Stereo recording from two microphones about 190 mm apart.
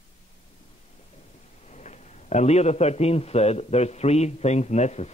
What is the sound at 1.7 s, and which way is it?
A man's voice, 40° left (ahead or behind).